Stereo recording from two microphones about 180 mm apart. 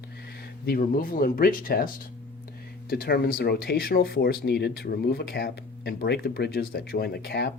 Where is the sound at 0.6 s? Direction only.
55° left (ahead or behind).